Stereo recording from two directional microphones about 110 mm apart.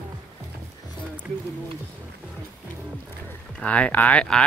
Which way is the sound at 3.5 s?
10° left (ahead or behind).